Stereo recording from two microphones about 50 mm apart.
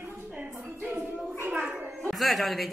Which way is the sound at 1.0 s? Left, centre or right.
Right.